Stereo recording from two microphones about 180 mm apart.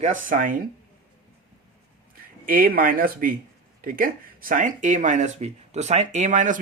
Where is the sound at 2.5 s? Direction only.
50° right (ahead or behind).